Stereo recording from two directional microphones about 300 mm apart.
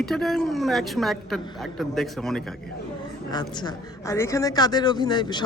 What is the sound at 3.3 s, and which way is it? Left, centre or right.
A woman's voice, centre.